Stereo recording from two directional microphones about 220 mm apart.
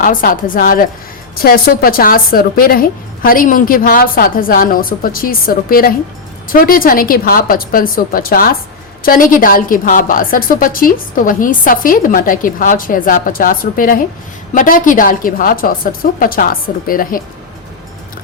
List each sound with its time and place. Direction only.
0.0 s a woman's voice: 40° left (ahead or behind)